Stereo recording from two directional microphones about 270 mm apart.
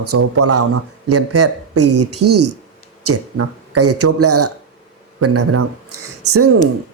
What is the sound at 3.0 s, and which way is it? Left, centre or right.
Speech, right.